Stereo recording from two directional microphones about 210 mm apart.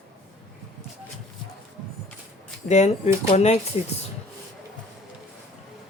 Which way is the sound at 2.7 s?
30° left (ahead or behind).